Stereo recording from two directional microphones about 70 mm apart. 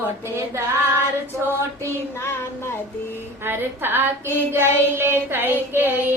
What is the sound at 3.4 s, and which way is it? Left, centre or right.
Child singing, right.